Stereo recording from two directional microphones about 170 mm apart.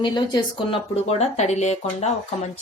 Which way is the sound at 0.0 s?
25° left (ahead or behind).